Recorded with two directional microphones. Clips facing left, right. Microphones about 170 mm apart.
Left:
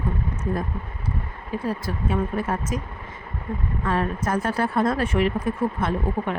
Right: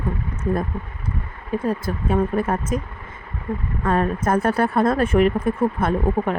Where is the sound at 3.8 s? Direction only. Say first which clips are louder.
Right 5 dB; 50° right (ahead or behind).